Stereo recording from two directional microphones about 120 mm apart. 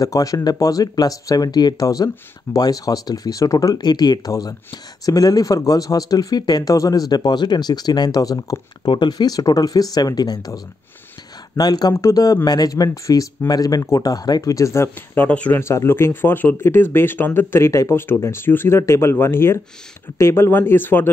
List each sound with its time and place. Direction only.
0.0 s speech: 30° left (ahead or behind)
15.2 s speech: 10° left (ahead or behind)
15.6 s speech: 20° left (ahead or behind)